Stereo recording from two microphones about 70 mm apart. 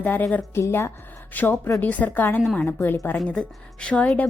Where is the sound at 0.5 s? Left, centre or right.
Left.